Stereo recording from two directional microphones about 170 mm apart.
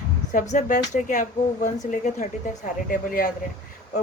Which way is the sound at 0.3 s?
50° left (ahead or behind).